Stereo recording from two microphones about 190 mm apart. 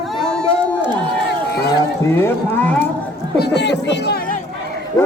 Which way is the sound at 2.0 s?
10° left (ahead or behind).